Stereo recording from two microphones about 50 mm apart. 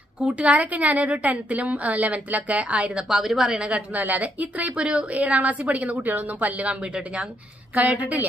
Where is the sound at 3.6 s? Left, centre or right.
Right.